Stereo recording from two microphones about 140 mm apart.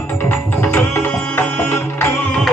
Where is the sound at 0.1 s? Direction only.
15° left (ahead or behind).